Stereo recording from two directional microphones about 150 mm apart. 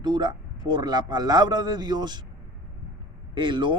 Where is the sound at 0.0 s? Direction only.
30° right (ahead or behind).